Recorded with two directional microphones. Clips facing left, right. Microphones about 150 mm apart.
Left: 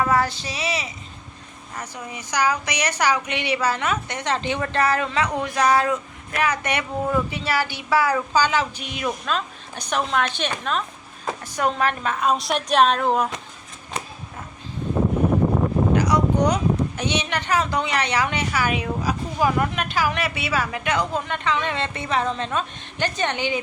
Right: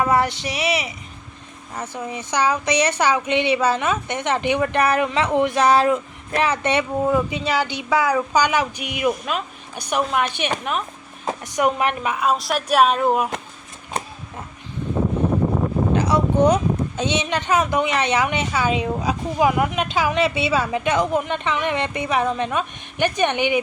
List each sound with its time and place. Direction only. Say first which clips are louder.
0.0 s a woman's voice: right 2 dB; 25° right (ahead or behind)
2.0 s a woman's voice: right 2 dB; 25° right (ahead or behind); by 13.3 s 5° right (ahead or behind)
16.0 s a sound: right 5 dB; 25° right (ahead or behind)
17.0 s a woman's voice: right 3 dB; 20° right (ahead or behind)